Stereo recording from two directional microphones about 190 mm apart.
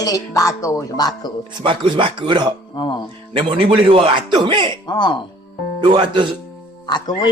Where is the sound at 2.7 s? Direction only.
25° left (ahead or behind).